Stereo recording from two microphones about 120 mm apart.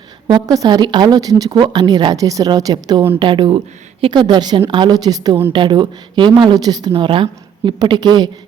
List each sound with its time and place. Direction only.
0.3 s speech: 35° right (ahead or behind)